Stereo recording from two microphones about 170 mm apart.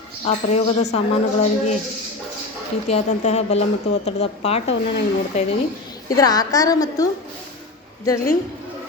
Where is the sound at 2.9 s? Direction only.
40° left (ahead or behind).